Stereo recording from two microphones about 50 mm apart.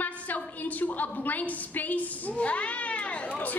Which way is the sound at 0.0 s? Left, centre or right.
Left.